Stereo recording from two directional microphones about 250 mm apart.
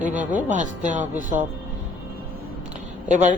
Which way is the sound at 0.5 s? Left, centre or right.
Right.